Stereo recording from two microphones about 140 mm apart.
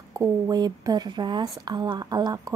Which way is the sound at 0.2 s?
30° right (ahead or behind).